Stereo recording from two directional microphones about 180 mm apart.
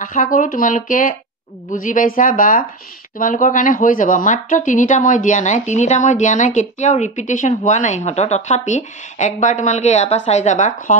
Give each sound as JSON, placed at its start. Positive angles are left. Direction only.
{"t": 0.0, "sound": "speech", "side_deg": 50}